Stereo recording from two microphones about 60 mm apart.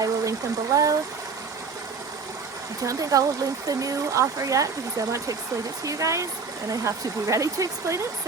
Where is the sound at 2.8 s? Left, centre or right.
Right.